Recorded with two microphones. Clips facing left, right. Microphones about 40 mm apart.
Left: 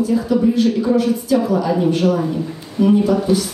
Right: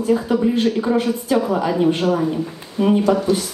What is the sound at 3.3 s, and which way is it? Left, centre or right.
Speech, centre.